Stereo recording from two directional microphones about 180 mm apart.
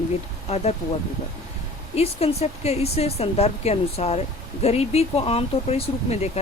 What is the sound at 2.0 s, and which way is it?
Speech, 35° left (ahead or behind).